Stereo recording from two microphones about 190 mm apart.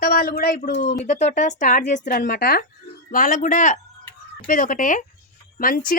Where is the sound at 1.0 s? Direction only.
40° left (ahead or behind).